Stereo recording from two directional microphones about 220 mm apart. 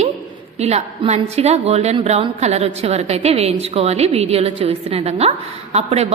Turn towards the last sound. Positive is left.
turn(degrees=-30)  # may be behind; listen again after turning